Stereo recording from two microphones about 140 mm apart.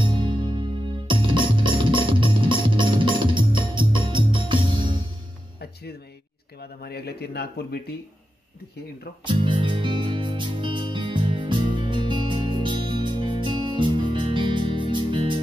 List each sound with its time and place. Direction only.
0.0 s music: 35° right (ahead or behind)
9.2 s music: 35° right (ahead or behind)